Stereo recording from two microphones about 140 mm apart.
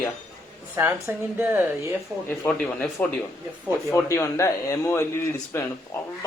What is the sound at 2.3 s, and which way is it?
A man's voice, 10° left (ahead or behind).